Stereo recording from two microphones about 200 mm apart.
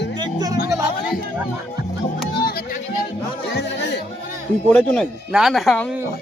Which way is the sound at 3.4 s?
60° left (ahead or behind).